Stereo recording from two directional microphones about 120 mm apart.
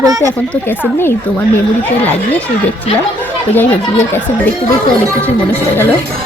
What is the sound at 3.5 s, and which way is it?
Speech, 15° left (ahead or behind).